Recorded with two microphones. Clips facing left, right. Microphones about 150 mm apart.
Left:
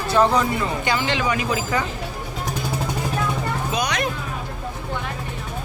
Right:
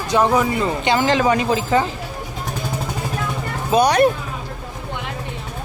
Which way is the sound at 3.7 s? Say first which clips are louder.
Right 13 dB; 35° right (ahead or behind).